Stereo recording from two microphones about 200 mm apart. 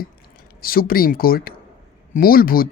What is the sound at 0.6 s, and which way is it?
A woman's voice, 45° left (ahead or behind).